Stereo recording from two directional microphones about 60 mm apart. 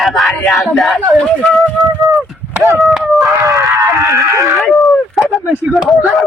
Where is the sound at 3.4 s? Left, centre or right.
Right.